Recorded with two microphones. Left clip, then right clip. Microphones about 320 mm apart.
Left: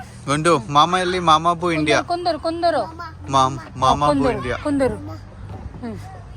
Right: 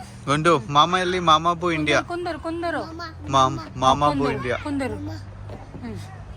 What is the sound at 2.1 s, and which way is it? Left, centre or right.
Speech, left.